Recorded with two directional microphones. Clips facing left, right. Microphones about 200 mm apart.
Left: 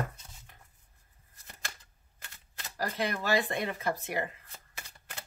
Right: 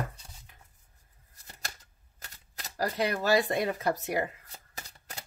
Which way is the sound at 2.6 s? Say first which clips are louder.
Right 3 dB; 40° right (ahead or behind).